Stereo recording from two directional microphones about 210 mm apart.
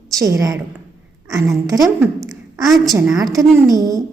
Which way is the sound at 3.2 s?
15° right (ahead or behind).